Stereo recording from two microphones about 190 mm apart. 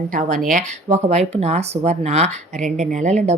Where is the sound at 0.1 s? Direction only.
45° right (ahead or behind).